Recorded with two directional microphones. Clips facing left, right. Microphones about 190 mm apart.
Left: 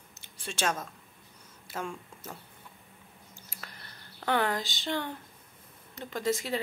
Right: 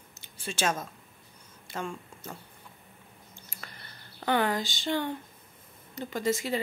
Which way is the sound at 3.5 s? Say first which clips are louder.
Even; centre (ahead or behind).